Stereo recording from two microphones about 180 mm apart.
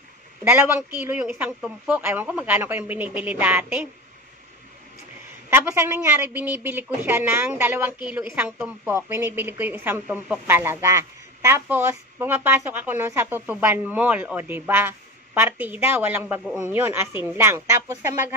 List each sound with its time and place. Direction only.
0.4 s a woman's voice: 10° right (ahead or behind)
5.5 s a woman's voice: 15° right (ahead or behind)